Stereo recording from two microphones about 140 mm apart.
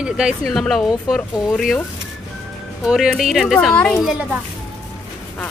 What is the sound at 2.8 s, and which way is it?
A woman's voice, 5° right (ahead or behind).